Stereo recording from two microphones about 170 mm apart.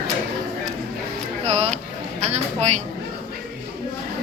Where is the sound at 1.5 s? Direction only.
40° right (ahead or behind).